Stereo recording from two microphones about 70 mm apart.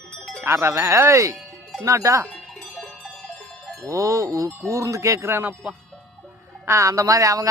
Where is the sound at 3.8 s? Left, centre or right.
Right.